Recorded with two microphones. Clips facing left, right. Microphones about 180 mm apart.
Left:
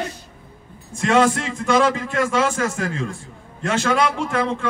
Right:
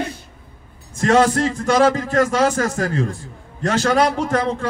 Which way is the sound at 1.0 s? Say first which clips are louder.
Right 2 dB; 40° right (ahead or behind).